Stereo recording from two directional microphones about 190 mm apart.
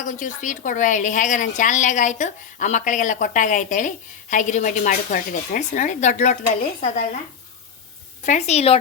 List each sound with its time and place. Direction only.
0.0 s a woman's voice: 40° left (ahead or behind)
8.2 s a woman's voice: 40° left (ahead or behind)